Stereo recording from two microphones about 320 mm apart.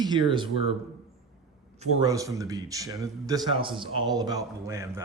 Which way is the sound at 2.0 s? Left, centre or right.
Centre.